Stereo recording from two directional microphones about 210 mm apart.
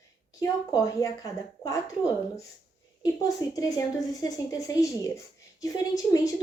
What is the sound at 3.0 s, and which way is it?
A woman's voice, 15° left (ahead or behind).